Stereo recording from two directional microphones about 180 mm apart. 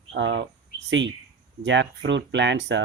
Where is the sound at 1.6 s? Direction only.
90° right.